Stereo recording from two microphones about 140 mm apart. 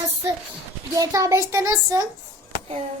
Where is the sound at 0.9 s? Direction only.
25° right (ahead or behind).